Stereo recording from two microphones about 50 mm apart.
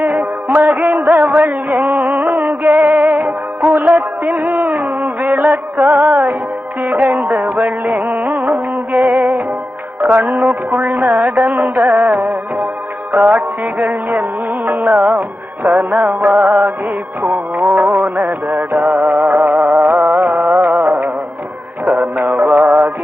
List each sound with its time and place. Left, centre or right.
0.0 s music: right